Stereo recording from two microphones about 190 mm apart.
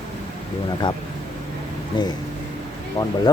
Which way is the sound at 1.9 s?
25° left (ahead or behind).